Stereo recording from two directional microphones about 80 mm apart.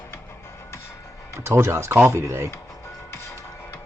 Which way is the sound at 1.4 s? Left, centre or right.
Right.